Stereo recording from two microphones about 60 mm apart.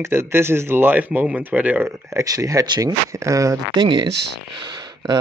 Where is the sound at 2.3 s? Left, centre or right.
Right.